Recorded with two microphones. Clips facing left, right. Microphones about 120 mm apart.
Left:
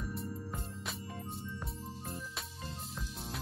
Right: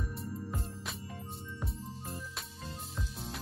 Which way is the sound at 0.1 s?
Centre (ahead or behind).